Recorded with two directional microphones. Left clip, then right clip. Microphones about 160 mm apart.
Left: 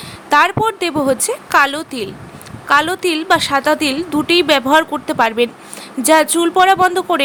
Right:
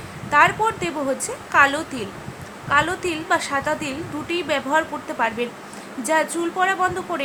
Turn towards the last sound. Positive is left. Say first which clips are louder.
# left 9 dB
turn(degrees=75)  # may be behind; listen again after turning